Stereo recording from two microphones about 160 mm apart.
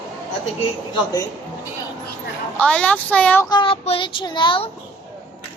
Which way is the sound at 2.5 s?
10° left (ahead or behind).